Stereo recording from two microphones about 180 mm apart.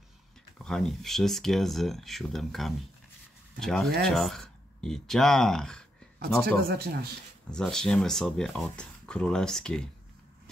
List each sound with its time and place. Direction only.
0.6 s speech: centre (ahead or behind)
6.4 s speech: 60° right (ahead or behind)
7.5 s speech: 5° left (ahead or behind)